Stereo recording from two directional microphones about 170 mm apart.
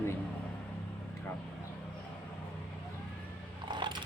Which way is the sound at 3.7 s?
25° right (ahead or behind).